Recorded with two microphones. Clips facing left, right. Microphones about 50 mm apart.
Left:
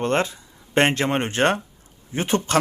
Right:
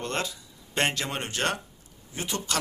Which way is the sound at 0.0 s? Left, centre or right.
Left.